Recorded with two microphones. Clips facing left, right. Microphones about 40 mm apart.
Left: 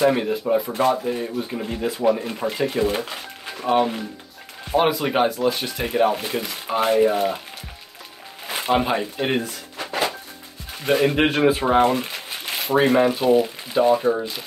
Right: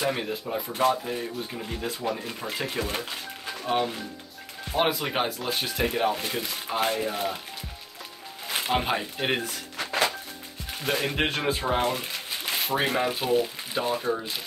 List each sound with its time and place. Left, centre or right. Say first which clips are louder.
0.0 s speech: left 9 dB; centre
3.0 s speech: left 4 dB; centre
4.6 s speech: left 6 dB; centre
8.5 s speech: left 5 dB; centre
9.8 s music: left 2 dB; left
10.9 s speech: left 8 dB; centre